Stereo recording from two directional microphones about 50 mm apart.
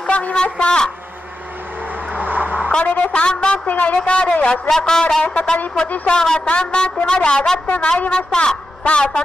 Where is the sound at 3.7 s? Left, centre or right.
Left.